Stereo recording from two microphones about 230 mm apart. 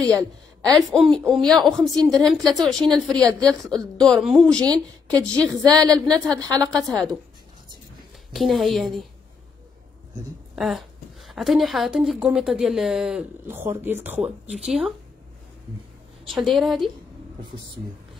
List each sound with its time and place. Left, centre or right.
0.7 s a woman's voice: centre
5.7 s a woman's voice: centre
5.9 s a woman's voice: centre
6.2 s a woman's voice: centre
6.6 s a woman's voice: centre
8.3 s a woman's voice: centre
10.5 s a woman's voice: centre
14.2 s speech: right
14.6 s a woman's voice: centre
16.3 s a woman's voice: centre